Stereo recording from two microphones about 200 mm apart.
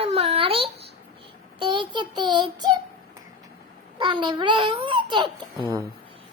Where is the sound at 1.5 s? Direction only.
25° right (ahead or behind).